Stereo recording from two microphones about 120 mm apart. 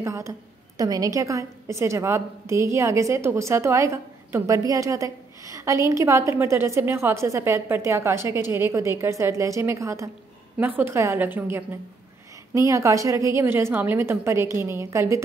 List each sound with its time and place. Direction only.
0.0 s a woman's voice: 25° right (ahead or behind)